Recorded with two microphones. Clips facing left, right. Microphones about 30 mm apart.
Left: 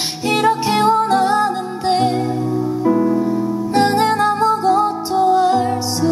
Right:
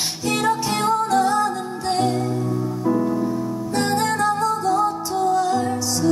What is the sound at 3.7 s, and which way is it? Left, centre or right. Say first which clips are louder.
Music: left 6 dB; left.